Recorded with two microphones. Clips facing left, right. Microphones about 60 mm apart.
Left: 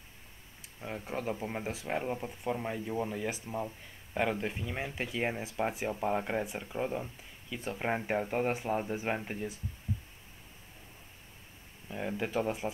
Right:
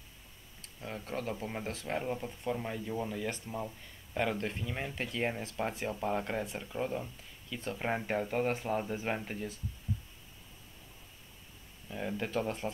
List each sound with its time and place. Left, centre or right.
0.6 s speech: centre
11.9 s speech: centre